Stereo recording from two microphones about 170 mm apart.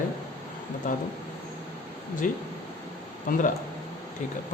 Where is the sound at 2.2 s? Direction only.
50° left (ahead or behind).